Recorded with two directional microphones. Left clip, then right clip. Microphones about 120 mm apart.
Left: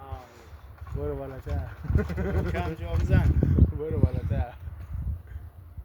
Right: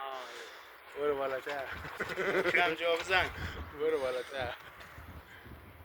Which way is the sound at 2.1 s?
35° left (ahead or behind).